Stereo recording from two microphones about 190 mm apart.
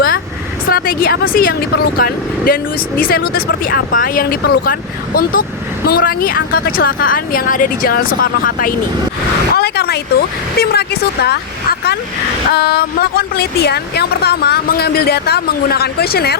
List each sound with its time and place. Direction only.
0.7 s speech: 50° left (ahead or behind)